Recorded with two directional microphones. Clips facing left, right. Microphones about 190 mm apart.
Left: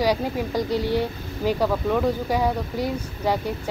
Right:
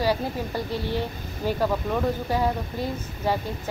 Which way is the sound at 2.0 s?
10° left (ahead or behind).